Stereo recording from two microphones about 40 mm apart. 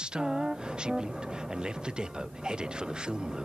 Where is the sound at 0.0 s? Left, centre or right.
Centre.